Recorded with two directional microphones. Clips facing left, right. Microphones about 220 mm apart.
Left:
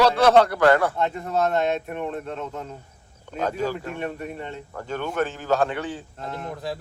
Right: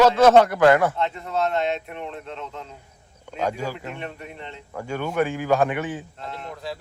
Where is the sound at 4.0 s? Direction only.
45° left (ahead or behind).